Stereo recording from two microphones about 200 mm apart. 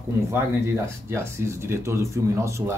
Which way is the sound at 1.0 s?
10° right (ahead or behind).